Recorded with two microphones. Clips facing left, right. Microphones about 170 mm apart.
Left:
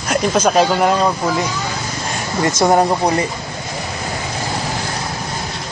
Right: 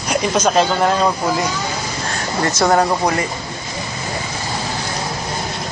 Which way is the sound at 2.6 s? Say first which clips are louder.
Left 1 dB; 15° left (ahead or behind).